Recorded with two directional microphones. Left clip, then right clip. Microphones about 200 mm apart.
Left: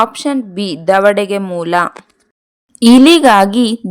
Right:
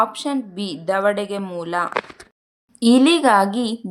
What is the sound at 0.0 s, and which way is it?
A woman's voice, 40° left (ahead or behind).